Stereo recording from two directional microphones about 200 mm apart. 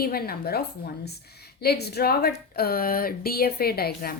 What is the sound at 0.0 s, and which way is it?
A woman's voice, 50° left (ahead or behind).